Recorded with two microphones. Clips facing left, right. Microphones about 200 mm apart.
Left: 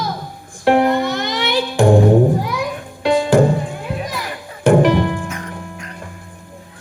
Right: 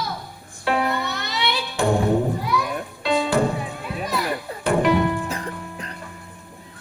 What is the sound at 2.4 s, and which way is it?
Music, 90° left.